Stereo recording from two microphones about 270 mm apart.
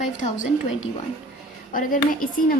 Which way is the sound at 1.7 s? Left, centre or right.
Left.